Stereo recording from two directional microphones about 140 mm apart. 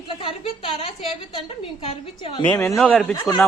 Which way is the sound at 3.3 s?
20° left (ahead or behind).